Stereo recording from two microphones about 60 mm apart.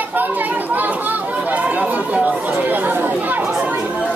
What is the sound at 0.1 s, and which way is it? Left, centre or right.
Chatter, right.